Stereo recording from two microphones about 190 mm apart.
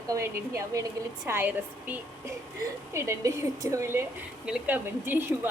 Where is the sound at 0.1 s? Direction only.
15° right (ahead or behind).